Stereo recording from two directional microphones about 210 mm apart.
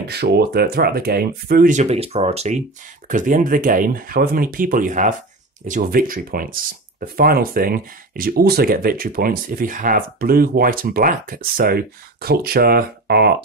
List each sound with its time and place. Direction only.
0.1 s speech: 50° right (ahead or behind)